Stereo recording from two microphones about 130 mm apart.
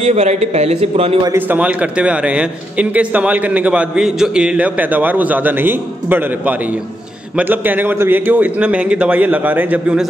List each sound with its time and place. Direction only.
0.0 s a man's voice: 55° right (ahead or behind)
1.5 s a man's voice: 10° right (ahead or behind)